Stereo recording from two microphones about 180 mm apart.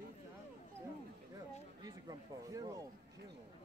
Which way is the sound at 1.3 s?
20° right (ahead or behind).